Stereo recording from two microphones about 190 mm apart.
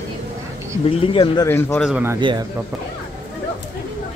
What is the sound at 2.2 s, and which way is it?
Speech, 25° right (ahead or behind).